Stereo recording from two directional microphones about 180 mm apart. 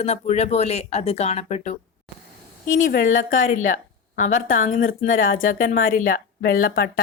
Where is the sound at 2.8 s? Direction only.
60° left (ahead or behind).